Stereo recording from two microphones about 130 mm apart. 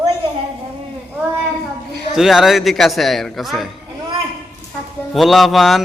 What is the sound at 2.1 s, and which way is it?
A man's voice, 5° right (ahead or behind).